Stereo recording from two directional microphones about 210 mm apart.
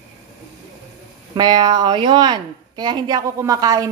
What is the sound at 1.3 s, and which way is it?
A woman's voice, 20° right (ahead or behind).